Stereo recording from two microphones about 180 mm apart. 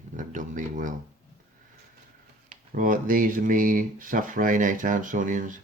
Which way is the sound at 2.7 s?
45° right (ahead or behind).